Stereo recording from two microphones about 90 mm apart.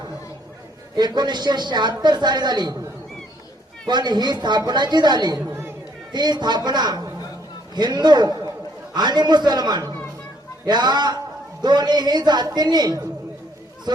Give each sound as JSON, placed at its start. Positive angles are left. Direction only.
{"t": 0.9, "sound": "speech", "side_deg": -55}
{"t": 3.8, "sound": "speech", "side_deg": -55}
{"t": 5.5, "sound": "chatter", "side_deg": -25}
{"t": 6.1, "sound": "speech", "side_deg": -50}